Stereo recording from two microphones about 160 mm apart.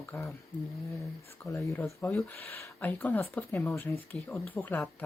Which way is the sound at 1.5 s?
15° left (ahead or behind).